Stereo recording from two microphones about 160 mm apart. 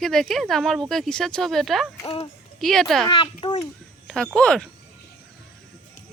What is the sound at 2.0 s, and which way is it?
Speech, 40° left (ahead or behind).